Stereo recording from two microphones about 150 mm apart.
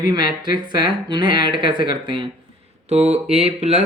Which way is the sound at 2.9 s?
45° right (ahead or behind).